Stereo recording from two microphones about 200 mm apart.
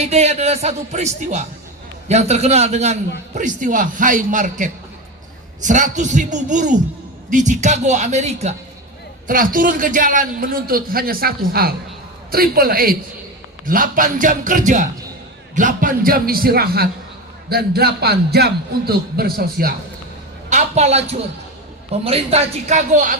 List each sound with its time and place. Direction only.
0.0 s a man's voice: 35° right (ahead or behind); by 19.7 s 50° right (ahead or behind)
20.5 s speech: 35° right (ahead or behind)